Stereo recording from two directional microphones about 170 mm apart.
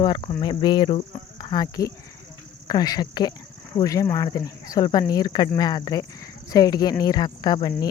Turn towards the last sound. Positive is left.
turn(degrees=25)  # may be behind; listen again after turning